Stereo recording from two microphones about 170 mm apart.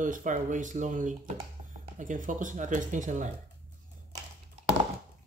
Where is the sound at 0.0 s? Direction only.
50° right (ahead or behind).